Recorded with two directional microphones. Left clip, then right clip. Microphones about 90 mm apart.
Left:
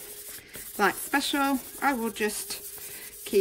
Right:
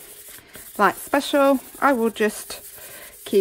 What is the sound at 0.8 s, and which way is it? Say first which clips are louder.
Speech: right 6 dB; 45° right (ahead or behind).